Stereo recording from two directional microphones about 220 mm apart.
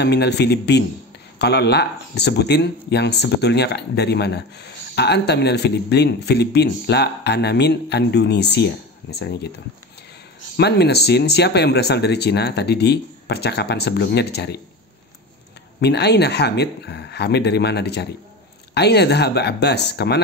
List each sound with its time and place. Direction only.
0.0 s speech: 50° left (ahead or behind)
10.5 s speech: 50° left (ahead or behind)
15.8 s speech: 50° left (ahead or behind)